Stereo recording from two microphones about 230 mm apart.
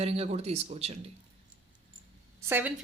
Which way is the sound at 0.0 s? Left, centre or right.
Right.